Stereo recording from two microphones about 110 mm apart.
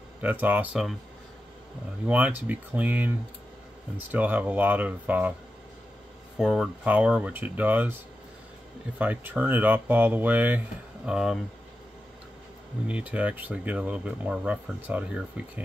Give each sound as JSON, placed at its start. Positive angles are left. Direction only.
{"t": 0.2, "sound": "speech", "side_deg": -15}
{"t": 2.0, "sound": "speech", "side_deg": -15}
{"t": 6.3, "sound": "speech", "side_deg": -5}
{"t": 8.9, "sound": "speech", "side_deg": -15}
{"t": 11.1, "sound": "speech", "side_deg": -5}
{"t": 12.8, "sound": "speech", "side_deg": -10}